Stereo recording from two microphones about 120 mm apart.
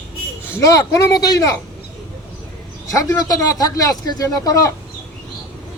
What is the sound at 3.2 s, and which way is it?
Speech, 30° left (ahead or behind).